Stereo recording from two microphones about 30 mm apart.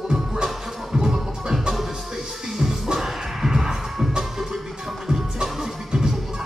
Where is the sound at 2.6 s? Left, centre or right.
Centre.